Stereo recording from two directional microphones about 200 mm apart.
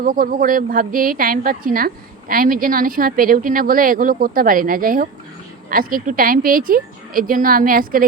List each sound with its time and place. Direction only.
0.0 s speech: 45° right (ahead or behind)